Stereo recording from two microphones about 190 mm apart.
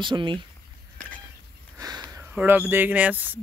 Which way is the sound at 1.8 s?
20° right (ahead or behind).